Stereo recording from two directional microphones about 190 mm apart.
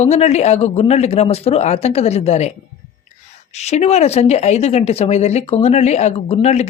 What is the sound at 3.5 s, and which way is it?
Speech, 35° left (ahead or behind).